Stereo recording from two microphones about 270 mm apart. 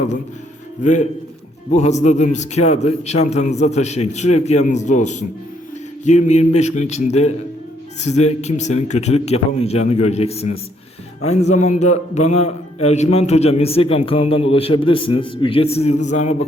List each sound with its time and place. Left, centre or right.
0.8 s a man's voice: left